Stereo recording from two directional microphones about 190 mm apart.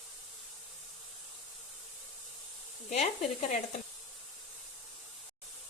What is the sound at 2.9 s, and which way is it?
Speech, 35° left (ahead or behind).